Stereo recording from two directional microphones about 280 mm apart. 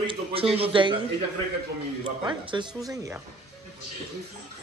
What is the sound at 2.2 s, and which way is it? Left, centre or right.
Speech, centre.